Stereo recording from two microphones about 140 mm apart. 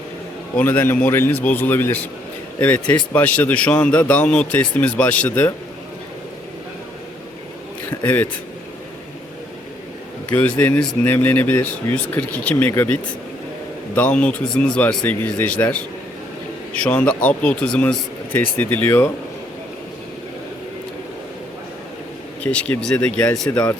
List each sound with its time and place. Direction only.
0.5 s a man's voice: 10° left (ahead or behind)
7.9 s speech: 15° left (ahead or behind)
10.3 s a man's voice: 15° left (ahead or behind)
22.5 s a man's voice: 10° left (ahead or behind)